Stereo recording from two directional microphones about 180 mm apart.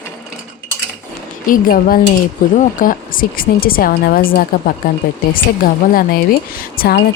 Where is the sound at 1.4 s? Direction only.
50° left (ahead or behind).